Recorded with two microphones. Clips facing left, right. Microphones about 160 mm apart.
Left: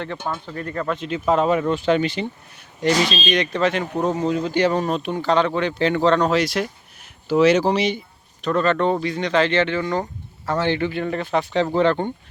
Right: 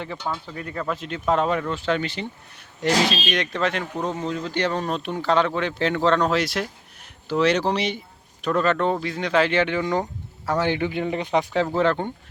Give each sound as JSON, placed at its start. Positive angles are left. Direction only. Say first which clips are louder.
{"t": 0.2, "sound": "speech", "louder": "left 1 dB", "side_deg": 50}
{"t": 0.4, "sound": "speech", "louder": "left 3 dB", "side_deg": -10}
{"t": 1.6, "sound": "speech", "louder": "left 6 dB", "side_deg": 15}
{"t": 2.6, "sound": "speech", "louder": "left 2 dB", "side_deg": 0}
{"t": 4.3, "sound": "speech", "louder": "left 6 dB", "side_deg": 10}
{"t": 11.5, "sound": "speech", "louder": "left 5 dB", "side_deg": -5}